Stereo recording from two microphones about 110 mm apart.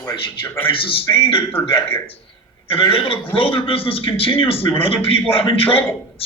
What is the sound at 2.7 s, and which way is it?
A man's voice, 55° left (ahead or behind).